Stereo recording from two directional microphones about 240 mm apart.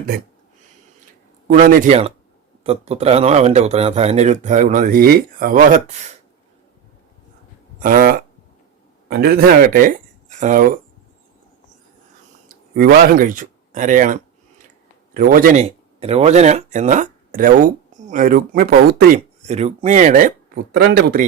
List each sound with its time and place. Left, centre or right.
1.5 s speech: right
7.8 s speech: right
12.7 s speech: right
16.0 s speech: right